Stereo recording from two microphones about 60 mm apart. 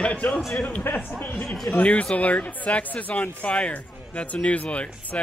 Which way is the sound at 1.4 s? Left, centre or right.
Centre.